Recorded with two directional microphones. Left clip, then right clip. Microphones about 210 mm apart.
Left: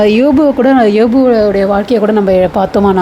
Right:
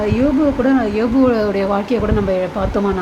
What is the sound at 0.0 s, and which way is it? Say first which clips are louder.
Speech: left 8 dB; 35° left (ahead or behind).